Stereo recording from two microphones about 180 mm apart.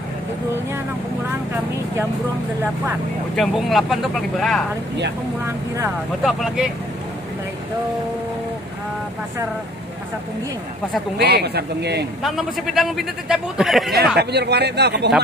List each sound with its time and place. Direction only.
3.3 s a man's voice: centre (ahead or behind)
6.2 s a man's voice: centre (ahead or behind)
11.1 s a man's voice: 65° right (ahead or behind)
12.2 s a man's voice: centre (ahead or behind)
14.3 s speech: 65° right (ahead or behind)